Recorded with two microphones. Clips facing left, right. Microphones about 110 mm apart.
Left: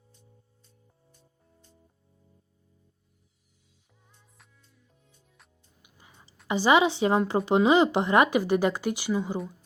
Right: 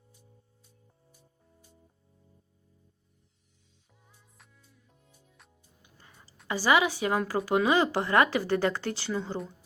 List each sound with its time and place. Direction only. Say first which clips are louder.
0.1 s music: left 1 dB; 10° right (ahead or behind)
4.1 s music: even; 5° right (ahead or behind)
5.8 s music: left 1 dB; 15° left (ahead or behind)
6.5 s speech: left 3 dB; 20° left (ahead or behind)